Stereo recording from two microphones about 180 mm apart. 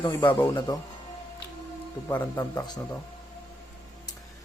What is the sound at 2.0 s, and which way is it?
Speech, 15° left (ahead or behind).